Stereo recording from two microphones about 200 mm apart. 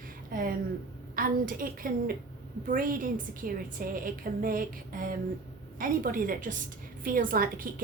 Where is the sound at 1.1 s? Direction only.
45° right (ahead or behind).